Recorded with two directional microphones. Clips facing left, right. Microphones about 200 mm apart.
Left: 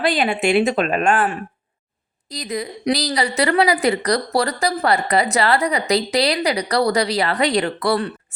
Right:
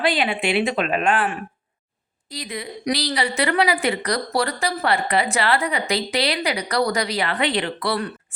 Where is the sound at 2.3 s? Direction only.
40° left (ahead or behind).